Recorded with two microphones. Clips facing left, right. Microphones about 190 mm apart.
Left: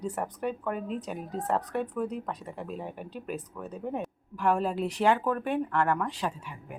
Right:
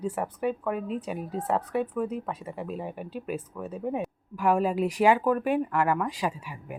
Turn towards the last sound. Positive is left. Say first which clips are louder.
# right 3 dB
turn(degrees=-10)  # may be behind; listen again after turning